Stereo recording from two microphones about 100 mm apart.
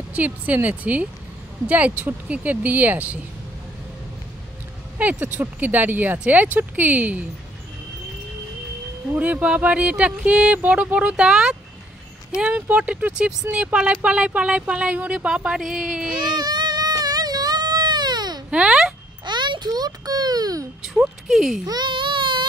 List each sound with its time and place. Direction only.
0.1 s speech: 15° right (ahead or behind)
4.9 s speech: 15° right (ahead or behind)
9.1 s speech: 15° right (ahead or behind)
16.1 s baby cry: 45° right (ahead or behind)
18.5 s speech: 10° right (ahead or behind)
19.2 s a sound: 50° right (ahead or behind)
21.3 s a child's voice: 5° right (ahead or behind)
21.6 s baby cry: 45° right (ahead or behind)